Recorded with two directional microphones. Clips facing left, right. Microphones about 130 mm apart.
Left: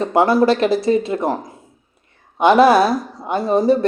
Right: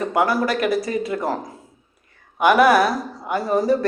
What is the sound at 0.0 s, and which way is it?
Speech, 25° left (ahead or behind).